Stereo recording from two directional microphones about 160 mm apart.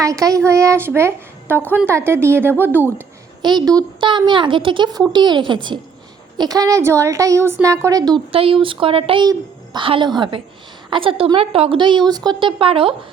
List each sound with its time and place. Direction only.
0.0 s speech: 20° right (ahead or behind)
3.4 s a woman's voice: 25° right (ahead or behind)